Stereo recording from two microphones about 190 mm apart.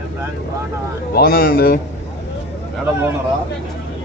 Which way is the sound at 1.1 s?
55° left (ahead or behind).